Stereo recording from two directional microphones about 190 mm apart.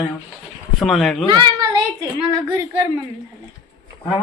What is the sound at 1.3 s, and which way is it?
A woman's voice, 25° right (ahead or behind).